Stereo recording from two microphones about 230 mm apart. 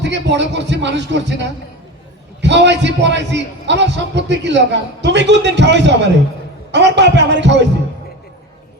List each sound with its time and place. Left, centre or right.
0.0 s a man's voice: right